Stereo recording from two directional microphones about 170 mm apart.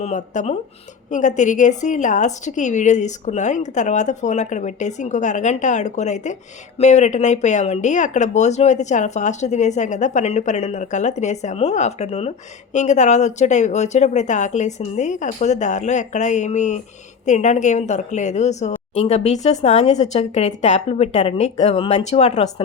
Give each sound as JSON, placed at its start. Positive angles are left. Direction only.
{"t": 0.0, "sound": "a woman's voice", "side_deg": 45}